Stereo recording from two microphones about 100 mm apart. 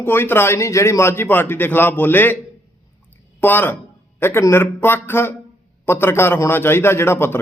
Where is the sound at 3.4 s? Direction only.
20° left (ahead or behind).